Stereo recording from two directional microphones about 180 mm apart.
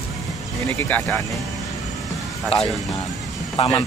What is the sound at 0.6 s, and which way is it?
Speech, 10° left (ahead or behind).